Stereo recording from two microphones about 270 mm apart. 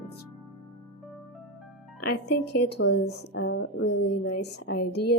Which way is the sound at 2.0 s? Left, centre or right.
Left.